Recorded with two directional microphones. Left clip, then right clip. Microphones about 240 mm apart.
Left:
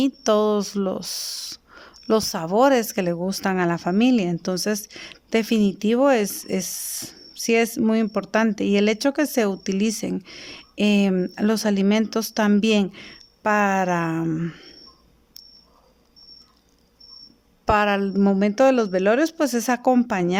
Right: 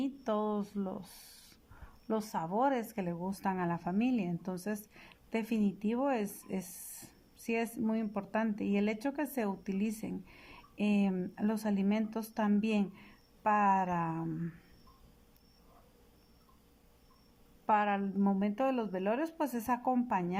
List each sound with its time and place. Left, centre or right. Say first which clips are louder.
0.0 s speech: left 15 dB; left
13.8 s speech: left 12 dB; left
17.7 s speech: left 11 dB; left